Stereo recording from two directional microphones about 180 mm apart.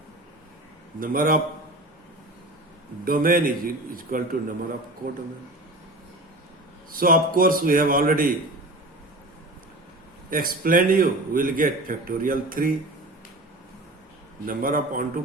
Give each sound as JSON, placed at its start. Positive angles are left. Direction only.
{"t": 0.9, "sound": "a man's voice", "side_deg": -50}
{"t": 3.0, "sound": "a man's voice", "side_deg": -50}
{"t": 6.9, "sound": "a man's voice", "side_deg": -50}
{"t": 10.2, "sound": "a man's voice", "side_deg": -50}
{"t": 14.4, "sound": "a man's voice", "side_deg": -50}